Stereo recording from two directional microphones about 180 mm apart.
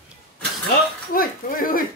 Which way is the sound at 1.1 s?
50° left (ahead or behind).